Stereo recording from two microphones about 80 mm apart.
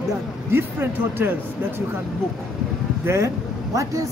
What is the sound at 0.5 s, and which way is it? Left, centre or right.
Speech, right.